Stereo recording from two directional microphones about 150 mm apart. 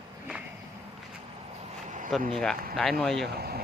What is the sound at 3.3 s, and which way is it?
Speech, 90° right.